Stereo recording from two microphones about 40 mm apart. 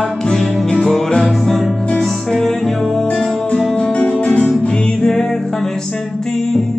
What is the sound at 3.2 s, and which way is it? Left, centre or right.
Music, left.